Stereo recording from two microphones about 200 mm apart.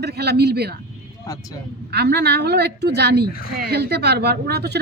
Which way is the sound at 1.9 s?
55° right (ahead or behind).